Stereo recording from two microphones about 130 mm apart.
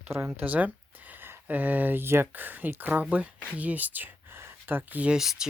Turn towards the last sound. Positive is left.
turn(degrees=-5)  # may be behind; listen again after turning